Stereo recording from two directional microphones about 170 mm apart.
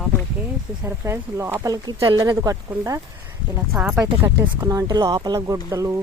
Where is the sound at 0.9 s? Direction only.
15° right (ahead or behind).